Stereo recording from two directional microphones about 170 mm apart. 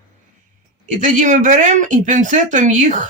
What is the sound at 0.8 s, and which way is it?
Speech, 50° right (ahead or behind).